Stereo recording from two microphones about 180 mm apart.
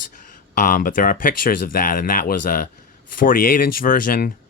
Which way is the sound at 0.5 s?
45° left (ahead or behind).